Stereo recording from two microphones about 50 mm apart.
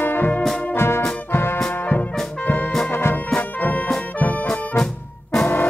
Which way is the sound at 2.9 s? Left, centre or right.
Left.